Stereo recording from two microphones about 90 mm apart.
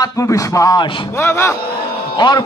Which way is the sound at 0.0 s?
35° left (ahead or behind).